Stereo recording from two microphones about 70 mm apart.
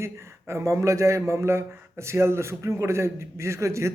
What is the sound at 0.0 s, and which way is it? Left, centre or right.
A man's voice, right.